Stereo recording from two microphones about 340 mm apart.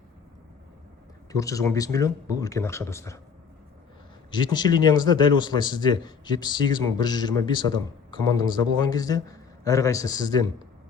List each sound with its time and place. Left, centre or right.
1.3 s a man's voice: centre
4.3 s a man's voice: centre